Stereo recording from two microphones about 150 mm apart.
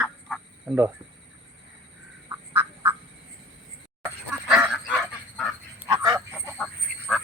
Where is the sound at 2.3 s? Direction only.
15° right (ahead or behind).